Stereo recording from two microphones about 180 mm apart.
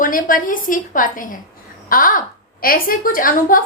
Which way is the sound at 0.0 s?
50° left (ahead or behind).